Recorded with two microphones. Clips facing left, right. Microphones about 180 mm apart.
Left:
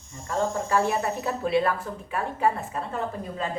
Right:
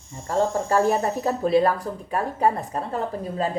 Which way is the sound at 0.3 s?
40° right (ahead or behind).